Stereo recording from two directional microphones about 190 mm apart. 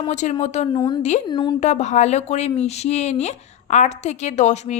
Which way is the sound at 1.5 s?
35° left (ahead or behind).